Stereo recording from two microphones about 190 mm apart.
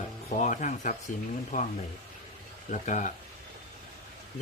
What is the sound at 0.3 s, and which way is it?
Speech, 40° left (ahead or behind).